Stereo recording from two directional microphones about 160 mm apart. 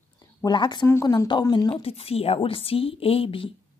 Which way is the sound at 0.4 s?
30° left (ahead or behind).